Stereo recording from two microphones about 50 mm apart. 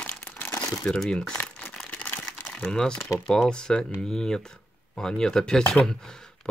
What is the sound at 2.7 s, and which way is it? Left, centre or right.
Speech, centre.